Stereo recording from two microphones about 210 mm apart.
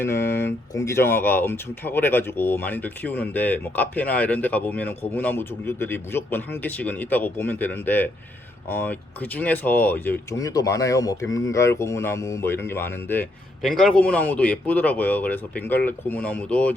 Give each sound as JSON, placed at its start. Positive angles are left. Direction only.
{"t": 0.0, "sound": "speech", "side_deg": 10}